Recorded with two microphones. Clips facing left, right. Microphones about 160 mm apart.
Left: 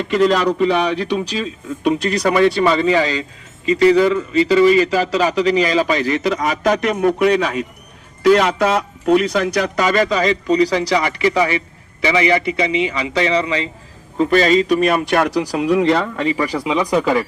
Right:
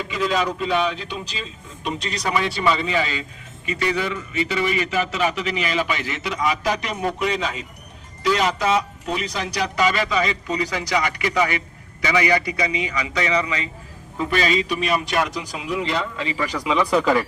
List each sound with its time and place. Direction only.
0.1 s a man's voice: 80° left
1.8 s a man's voice: 60° left (ahead or behind); by 13.7 s 30° left (ahead or behind)
14.2 s speech: 40° left (ahead or behind)
15.4 s a man's voice: 65° left (ahead or behind)
16.4 s a man's voice: 35° left (ahead or behind)
16.6 s speech: 15° left (ahead or behind)